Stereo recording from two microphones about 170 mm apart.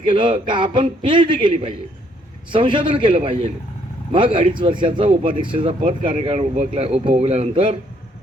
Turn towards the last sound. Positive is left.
turn(degrees=-40)  # may be behind; listen again after turning